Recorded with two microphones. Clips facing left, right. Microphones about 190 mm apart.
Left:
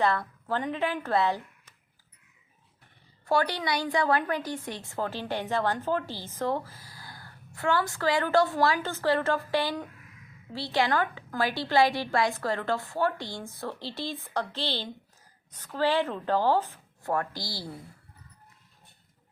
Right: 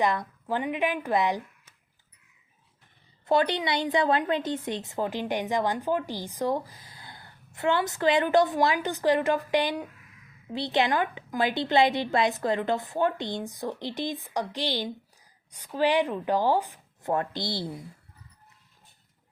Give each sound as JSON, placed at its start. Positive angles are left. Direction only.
{"t": 0.0, "sound": "a woman's voice", "side_deg": -15}
{"t": 3.2, "sound": "a woman's voice", "side_deg": -20}